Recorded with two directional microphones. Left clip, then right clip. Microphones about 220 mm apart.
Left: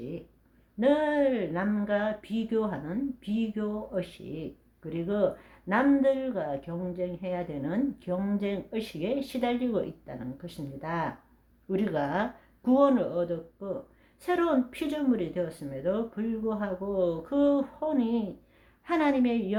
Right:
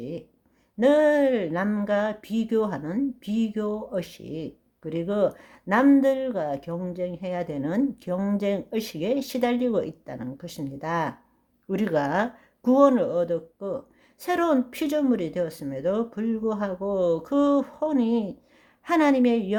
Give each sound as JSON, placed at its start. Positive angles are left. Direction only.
{"t": 0.8, "sound": "speech", "side_deg": -45}